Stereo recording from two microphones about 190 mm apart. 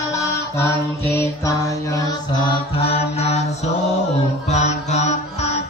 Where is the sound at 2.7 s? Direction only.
30° left (ahead or behind).